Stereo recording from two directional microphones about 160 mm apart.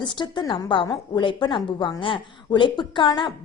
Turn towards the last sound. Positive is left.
turn(degrees=30)  # may be behind; listen again after turning